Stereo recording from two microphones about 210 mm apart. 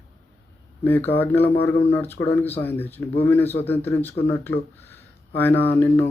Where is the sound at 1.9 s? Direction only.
10° left (ahead or behind).